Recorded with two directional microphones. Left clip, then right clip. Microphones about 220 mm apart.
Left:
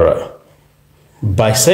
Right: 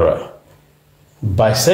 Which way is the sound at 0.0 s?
20° left (ahead or behind).